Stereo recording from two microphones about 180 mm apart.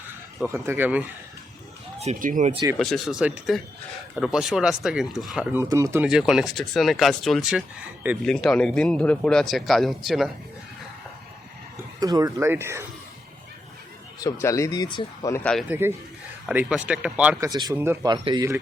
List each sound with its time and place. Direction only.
0.4 s speech: 15° right (ahead or behind)
2.1 s speech: 50° right (ahead or behind)
2.7 s speech: centre (ahead or behind)
11.9 s speech: 20° right (ahead or behind)
14.2 s speech: 20° left (ahead or behind)
16.5 s speech: 5° right (ahead or behind)
17.5 s speech: 20° right (ahead or behind)